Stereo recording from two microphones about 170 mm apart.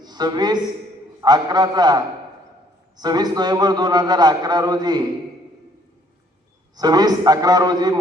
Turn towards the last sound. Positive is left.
turn(degrees=-20)  # may be behind; listen again after turning